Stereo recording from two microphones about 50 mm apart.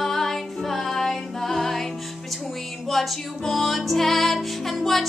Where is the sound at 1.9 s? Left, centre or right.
Centre.